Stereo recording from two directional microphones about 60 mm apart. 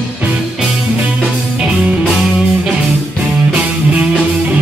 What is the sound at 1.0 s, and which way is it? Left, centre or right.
Music, centre.